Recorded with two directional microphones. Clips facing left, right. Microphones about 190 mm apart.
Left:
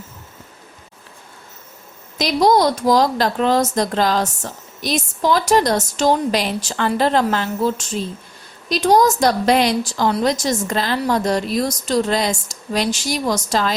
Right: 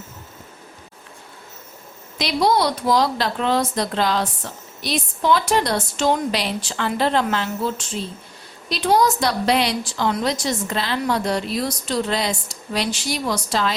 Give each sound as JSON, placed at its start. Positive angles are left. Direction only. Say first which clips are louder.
{"t": 2.1, "sound": "a woman's voice", "louder": "left 4 dB", "side_deg": 45}